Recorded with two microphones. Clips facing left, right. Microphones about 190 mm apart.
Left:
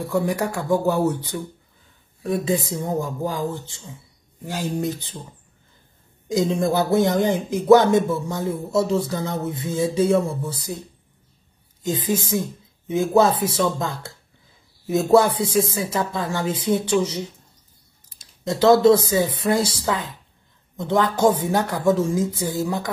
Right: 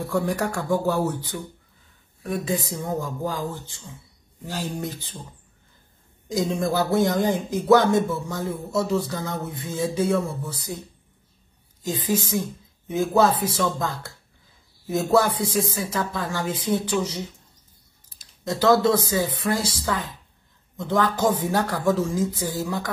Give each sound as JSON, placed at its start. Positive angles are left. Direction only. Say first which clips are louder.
{"t": 0.1, "sound": "a man's voice", "louder": "left 2 dB", "side_deg": 15}
{"t": 6.3, "sound": "a man's voice", "louder": "left 3 dB", "side_deg": 20}
{"t": 11.8, "sound": "a man's voice", "louder": "left 2 dB", "side_deg": 20}
{"t": 18.4, "sound": "a man's voice", "louder": "left 4 dB", "side_deg": 20}